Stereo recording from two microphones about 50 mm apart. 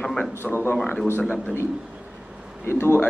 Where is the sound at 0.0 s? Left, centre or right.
Centre.